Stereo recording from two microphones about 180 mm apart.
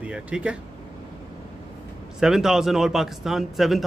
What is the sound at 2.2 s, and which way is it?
A man's voice, 5° right (ahead or behind).